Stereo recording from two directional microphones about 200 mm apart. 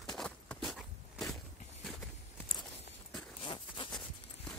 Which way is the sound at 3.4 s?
25° left (ahead or behind).